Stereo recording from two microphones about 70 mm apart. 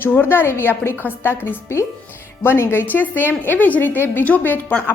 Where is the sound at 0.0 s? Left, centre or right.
Left.